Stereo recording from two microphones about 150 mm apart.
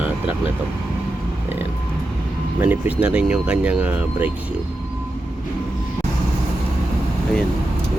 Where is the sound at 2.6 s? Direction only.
10° right (ahead or behind).